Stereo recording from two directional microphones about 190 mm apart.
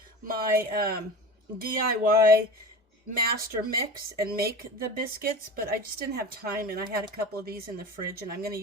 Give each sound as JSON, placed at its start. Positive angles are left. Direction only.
{"t": 0.3, "sound": "speech", "side_deg": -50}
{"t": 3.2, "sound": "speech", "side_deg": -50}